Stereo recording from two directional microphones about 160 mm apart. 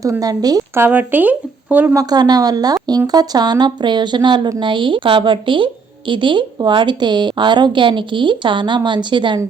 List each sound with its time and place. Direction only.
0.0 s speech: 20° right (ahead or behind)